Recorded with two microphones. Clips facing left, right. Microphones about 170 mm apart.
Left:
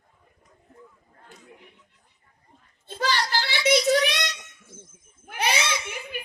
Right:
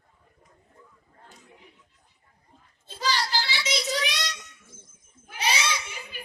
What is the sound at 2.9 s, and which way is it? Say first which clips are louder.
Child singing: left 2 dB; 55° left (ahead or behind).